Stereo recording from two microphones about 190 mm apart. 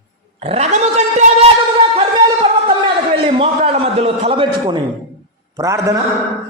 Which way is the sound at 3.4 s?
30° right (ahead or behind).